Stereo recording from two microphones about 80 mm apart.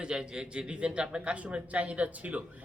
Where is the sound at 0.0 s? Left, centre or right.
Centre.